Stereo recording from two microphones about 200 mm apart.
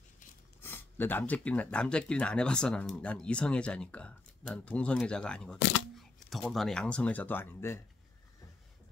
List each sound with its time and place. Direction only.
0.6 s speech: 10° left (ahead or behind)